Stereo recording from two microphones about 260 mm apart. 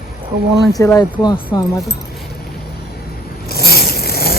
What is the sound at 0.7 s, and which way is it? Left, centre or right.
Speech, centre.